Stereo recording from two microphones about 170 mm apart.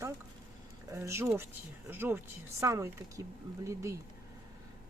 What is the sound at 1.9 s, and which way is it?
Speech, 10° right (ahead or behind).